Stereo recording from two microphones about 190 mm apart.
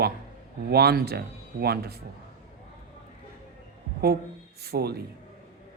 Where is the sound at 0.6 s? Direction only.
55° right (ahead or behind).